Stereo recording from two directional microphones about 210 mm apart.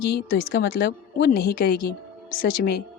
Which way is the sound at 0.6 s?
55° left (ahead or behind).